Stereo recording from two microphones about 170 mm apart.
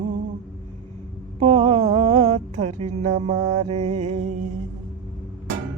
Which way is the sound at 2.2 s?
40° right (ahead or behind).